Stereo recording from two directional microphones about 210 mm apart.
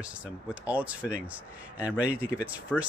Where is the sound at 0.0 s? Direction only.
5° right (ahead or behind).